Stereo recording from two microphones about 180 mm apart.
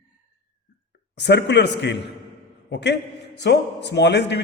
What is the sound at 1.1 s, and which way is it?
A man's voice, 70° left (ahead or behind).